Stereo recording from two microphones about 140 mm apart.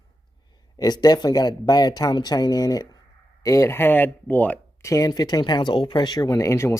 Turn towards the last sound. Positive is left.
turn(degrees=20)  # may be behind; listen again after turning